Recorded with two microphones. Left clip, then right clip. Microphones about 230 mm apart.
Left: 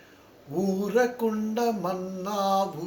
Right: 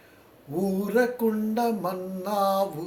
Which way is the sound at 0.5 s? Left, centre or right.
Right.